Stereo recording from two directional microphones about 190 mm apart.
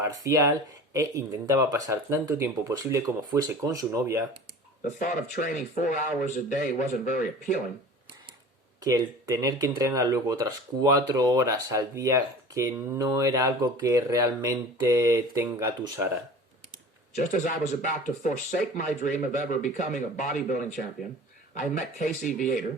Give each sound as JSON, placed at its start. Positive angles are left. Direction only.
{"t": 0.0, "sound": "speech", "side_deg": -15}
{"t": 4.9, "sound": "speech", "side_deg": 45}
{"t": 8.8, "sound": "speech", "side_deg": -20}
{"t": 17.2, "sound": "speech", "side_deg": 40}
{"t": 21.8, "sound": "speech", "side_deg": 45}